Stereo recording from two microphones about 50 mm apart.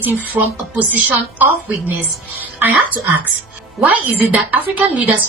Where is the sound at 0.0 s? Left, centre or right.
Right.